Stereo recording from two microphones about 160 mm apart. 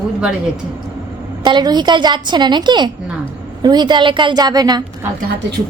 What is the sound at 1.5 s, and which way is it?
A woman's voice, 25° right (ahead or behind).